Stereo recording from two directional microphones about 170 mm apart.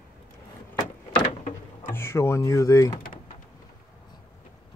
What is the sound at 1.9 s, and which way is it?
Speech, 15° left (ahead or behind).